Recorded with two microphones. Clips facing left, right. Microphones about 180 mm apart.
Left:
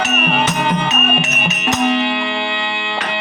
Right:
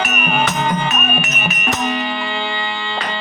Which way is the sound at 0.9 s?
25° left (ahead or behind).